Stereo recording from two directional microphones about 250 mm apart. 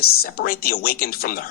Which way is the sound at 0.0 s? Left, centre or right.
Left.